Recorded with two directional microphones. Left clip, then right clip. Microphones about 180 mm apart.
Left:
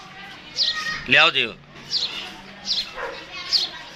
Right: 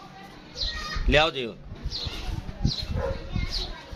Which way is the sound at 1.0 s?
5° right (ahead or behind).